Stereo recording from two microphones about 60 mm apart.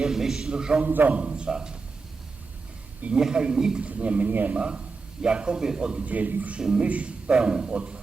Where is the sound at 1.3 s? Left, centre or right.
Centre.